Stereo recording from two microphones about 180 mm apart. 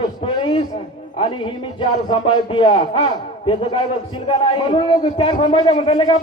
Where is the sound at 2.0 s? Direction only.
25° left (ahead or behind).